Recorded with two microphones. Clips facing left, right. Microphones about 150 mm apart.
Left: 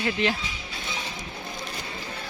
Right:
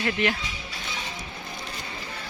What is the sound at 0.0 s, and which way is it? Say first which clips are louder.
Speech: even; 20° left (ahead or behind).